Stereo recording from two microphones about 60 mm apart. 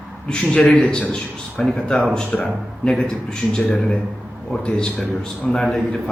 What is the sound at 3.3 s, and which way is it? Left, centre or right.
A man's voice, centre.